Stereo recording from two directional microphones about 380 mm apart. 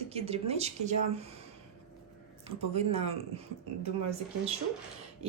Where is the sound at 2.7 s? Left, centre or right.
Centre.